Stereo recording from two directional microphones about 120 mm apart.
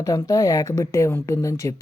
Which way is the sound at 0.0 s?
30° left (ahead or behind).